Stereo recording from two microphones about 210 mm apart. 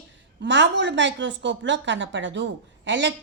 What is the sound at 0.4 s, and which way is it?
A woman's voice, 55° right (ahead or behind).